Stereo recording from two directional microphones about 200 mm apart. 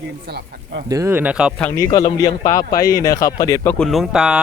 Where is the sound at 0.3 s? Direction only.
50° right (ahead or behind).